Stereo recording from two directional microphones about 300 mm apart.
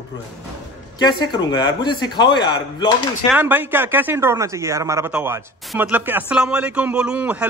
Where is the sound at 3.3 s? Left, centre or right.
Centre.